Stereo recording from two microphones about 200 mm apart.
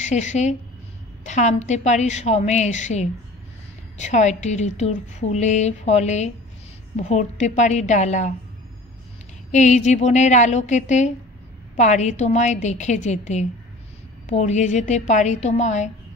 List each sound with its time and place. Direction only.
0.0 s a woman's voice: 35° left (ahead or behind)
9.5 s a woman's voice: 35° left (ahead or behind)